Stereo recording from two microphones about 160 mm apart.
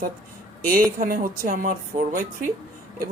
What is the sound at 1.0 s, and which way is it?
Speech, 60° right (ahead or behind).